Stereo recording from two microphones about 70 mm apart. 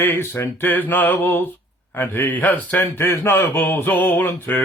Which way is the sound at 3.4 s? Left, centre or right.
Left.